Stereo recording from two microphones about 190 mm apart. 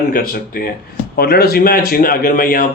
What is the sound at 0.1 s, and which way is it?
Speech, 50° left (ahead or behind).